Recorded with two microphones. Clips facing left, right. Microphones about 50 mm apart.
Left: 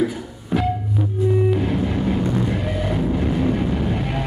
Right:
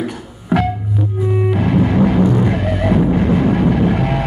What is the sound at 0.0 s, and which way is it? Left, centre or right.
Music, right.